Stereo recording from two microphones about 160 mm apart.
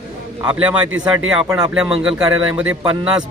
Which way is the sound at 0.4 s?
5° right (ahead or behind).